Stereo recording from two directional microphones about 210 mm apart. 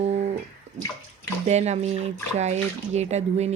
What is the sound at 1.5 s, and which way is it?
Speech, 30° right (ahead or behind).